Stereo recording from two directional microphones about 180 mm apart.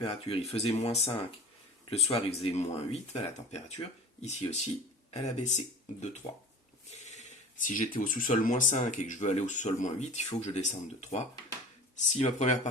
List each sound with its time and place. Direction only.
0.0 s speech: 30° left (ahead or behind)